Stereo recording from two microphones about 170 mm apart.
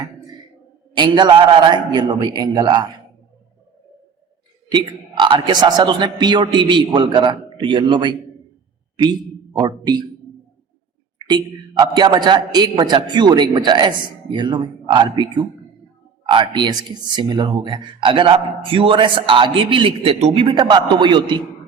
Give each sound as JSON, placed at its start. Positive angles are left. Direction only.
{"t": 0.9, "sound": "a man's voice", "side_deg": -25}
{"t": 4.7, "sound": "a man's voice", "side_deg": -30}
{"t": 11.3, "sound": "a man's voice", "side_deg": -25}